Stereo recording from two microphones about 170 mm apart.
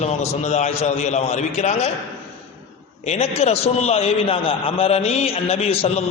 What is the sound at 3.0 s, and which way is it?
A man's voice, 40° left (ahead or behind).